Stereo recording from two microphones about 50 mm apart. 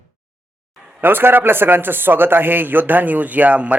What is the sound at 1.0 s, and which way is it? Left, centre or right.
A man's voice, right.